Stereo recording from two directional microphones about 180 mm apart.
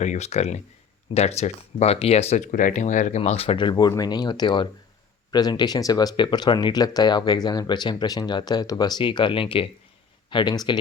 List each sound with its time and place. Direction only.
0.0 s speech: 40° left (ahead or behind); by 10.8 s 25° left (ahead or behind)